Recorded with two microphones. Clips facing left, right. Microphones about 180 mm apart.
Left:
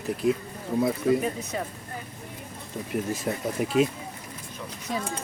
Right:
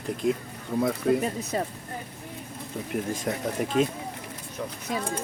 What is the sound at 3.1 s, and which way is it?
Speech, 5° left (ahead or behind).